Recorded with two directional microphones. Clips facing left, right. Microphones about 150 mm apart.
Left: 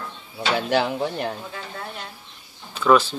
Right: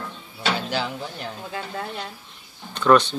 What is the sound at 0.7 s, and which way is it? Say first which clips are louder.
Speech: left 6 dB; 60° left (ahead or behind).